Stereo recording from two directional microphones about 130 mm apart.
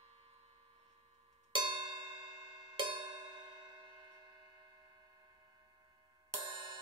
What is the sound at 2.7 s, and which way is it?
Music, 40° right (ahead or behind).